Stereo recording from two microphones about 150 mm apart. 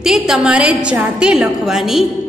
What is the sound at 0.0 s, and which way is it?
A woman's voice, centre (ahead or behind).